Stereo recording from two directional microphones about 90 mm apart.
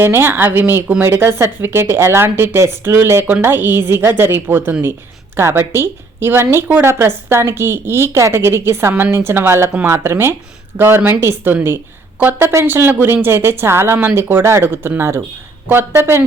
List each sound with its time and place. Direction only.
0.0 s a woman's voice: 25° right (ahead or behind)